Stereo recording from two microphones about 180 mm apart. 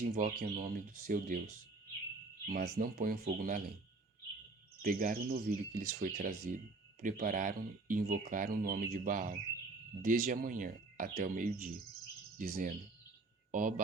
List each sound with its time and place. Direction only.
0.0 s speech: 45° right (ahead or behind)
2.5 s speech: 55° right (ahead or behind)
4.8 s speech: 55° right (ahead or behind)